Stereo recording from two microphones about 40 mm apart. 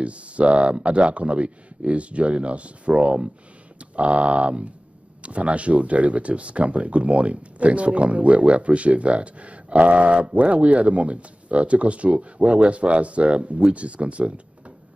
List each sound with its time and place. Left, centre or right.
0.0 s speech: right